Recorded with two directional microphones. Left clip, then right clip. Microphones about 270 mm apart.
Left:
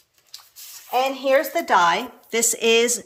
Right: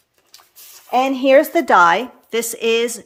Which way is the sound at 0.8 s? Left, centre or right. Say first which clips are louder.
Right 5 dB; right.